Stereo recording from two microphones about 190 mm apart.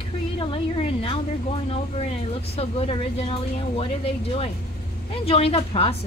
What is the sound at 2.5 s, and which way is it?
A woman's voice, 30° left (ahead or behind).